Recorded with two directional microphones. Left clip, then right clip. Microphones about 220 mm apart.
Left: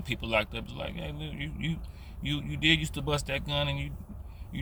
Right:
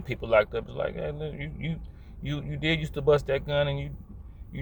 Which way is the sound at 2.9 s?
10° left (ahead or behind).